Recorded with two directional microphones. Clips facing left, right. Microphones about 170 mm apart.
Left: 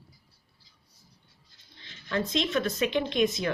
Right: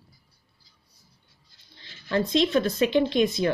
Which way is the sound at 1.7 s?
35° right (ahead or behind).